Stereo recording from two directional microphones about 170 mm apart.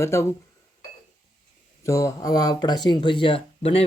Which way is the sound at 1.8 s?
20° left (ahead or behind).